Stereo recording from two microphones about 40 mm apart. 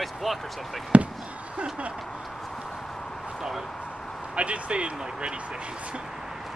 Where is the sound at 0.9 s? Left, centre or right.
Right.